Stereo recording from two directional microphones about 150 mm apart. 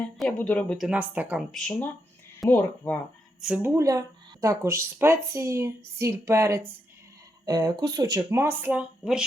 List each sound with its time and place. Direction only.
0.0 s speech: 10° left (ahead or behind)
0.8 s speech: 10° right (ahead or behind)
1.5 s speech: 5° left (ahead or behind)
3.4 s speech: 10° right (ahead or behind)